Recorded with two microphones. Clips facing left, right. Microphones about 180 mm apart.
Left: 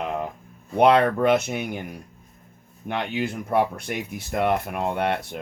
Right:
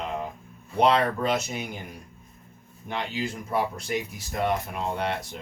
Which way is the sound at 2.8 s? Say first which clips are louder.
Left 4 dB; 60° left (ahead or behind).